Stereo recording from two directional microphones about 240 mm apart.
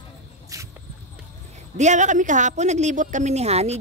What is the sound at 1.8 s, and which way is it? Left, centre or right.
A woman's voice, right.